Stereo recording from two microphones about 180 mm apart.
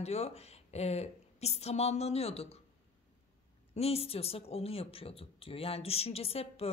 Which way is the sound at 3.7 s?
35° left (ahead or behind).